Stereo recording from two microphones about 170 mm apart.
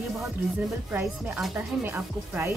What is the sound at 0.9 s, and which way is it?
Speech, 10° right (ahead or behind).